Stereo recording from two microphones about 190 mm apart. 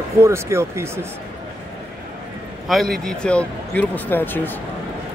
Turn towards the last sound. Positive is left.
turn(degrees=10)  # may be behind; listen again after turning